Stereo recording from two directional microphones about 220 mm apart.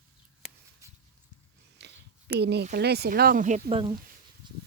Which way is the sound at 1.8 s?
50° right (ahead or behind).